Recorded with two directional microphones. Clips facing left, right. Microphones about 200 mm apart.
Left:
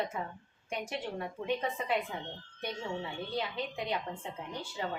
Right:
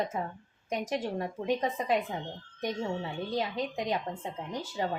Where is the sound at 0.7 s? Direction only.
40° right (ahead or behind).